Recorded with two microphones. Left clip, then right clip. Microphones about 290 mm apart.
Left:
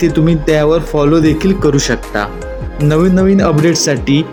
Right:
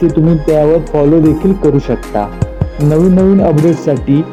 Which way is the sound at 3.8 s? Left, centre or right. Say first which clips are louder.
Right 1 dB; centre.